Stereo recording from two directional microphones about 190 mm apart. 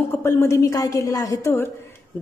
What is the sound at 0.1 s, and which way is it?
A woman's voice, 15° left (ahead or behind).